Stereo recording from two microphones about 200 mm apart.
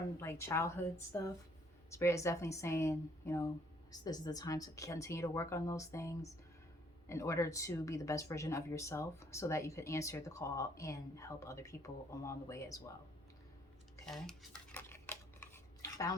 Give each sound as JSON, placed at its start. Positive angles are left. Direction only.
{"t": 0.2, "sound": "speech", "side_deg": 15}
{"t": 14.0, "sound": "dishes", "side_deg": 5}